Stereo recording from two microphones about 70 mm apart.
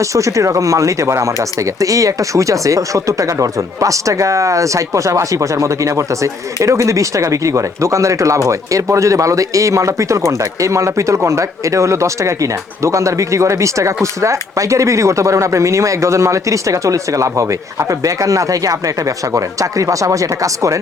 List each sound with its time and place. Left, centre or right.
0.0 s speech: right